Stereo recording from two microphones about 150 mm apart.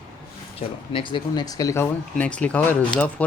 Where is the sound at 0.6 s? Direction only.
40° left (ahead or behind).